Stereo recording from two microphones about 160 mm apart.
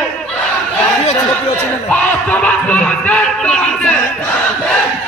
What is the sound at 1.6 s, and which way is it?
Speech, 10° left (ahead or behind).